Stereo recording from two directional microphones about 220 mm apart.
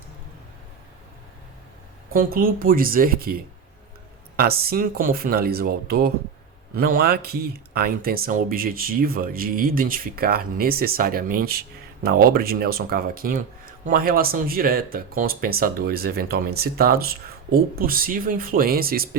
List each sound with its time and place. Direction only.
2.1 s speech: 40° right (ahead or behind)